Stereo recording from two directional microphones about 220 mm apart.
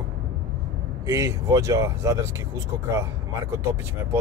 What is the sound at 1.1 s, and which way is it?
Speech, 15° right (ahead or behind).